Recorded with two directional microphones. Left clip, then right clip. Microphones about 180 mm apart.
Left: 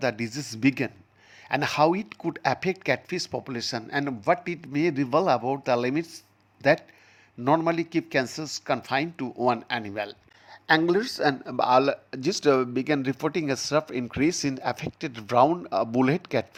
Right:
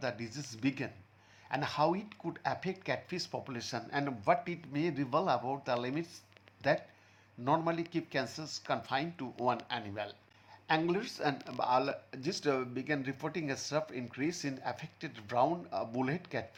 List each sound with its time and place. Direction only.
0.0 s speech: 50° left (ahead or behind)